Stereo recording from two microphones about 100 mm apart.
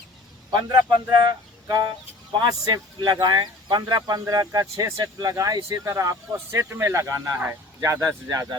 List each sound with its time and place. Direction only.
0.5 s speech: 45° right (ahead or behind)